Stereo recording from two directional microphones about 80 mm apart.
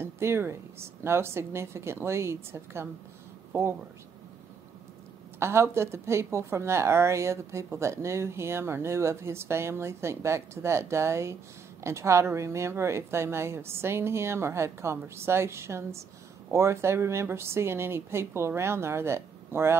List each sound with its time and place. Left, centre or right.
0.0 s speech: right
5.4 s speech: right